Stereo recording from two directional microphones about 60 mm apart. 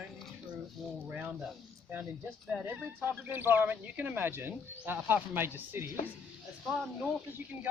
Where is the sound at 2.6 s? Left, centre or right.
Right.